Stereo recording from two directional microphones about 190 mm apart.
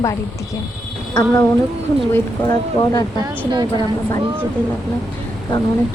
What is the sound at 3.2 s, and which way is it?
Speech, 20° right (ahead or behind).